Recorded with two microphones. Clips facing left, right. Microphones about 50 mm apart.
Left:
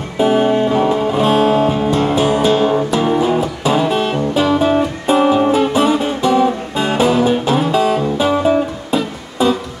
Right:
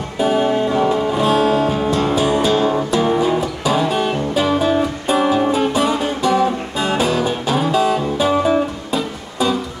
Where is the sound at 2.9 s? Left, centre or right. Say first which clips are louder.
Left 1 dB; centre.